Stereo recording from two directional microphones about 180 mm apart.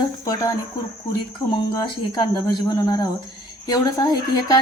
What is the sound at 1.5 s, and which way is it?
Speech, 25° left (ahead or behind).